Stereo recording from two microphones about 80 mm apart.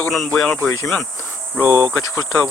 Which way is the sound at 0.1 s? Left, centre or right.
Centre.